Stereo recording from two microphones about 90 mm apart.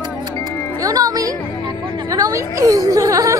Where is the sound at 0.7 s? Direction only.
40° right (ahead or behind).